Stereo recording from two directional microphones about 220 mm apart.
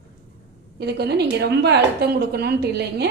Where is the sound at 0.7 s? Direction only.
50° right (ahead or behind).